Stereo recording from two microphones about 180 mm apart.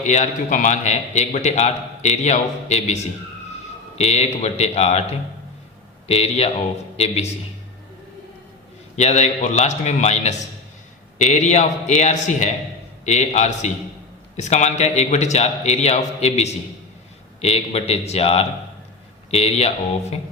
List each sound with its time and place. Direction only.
0.0 s a man's voice: 40° left (ahead or behind)
6.1 s a man's voice: 35° left (ahead or behind)
9.0 s a man's voice: 40° left (ahead or behind)